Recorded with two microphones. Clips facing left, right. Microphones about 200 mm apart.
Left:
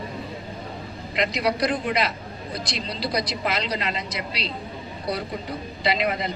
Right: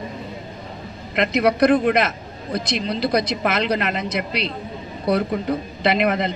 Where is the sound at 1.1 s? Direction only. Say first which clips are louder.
Right 6 dB; 60° right (ahead or behind).